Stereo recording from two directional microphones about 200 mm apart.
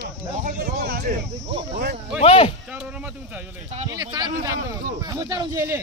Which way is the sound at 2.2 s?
30° left (ahead or behind).